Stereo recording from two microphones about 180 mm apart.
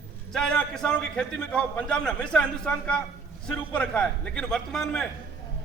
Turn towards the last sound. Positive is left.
turn(degrees=0)  # may be behind; listen again after turning